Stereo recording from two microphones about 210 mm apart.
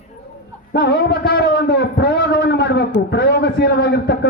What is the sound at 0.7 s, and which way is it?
A man's voice, 50° left (ahead or behind).